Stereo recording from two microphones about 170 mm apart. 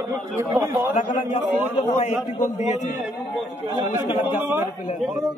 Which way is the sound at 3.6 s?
20° right (ahead or behind).